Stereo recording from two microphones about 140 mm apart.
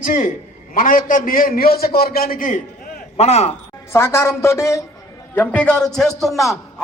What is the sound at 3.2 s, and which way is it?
Speech, 50° left (ahead or behind).